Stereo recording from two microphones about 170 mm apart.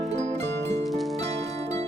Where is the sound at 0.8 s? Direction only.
Centre (ahead or behind).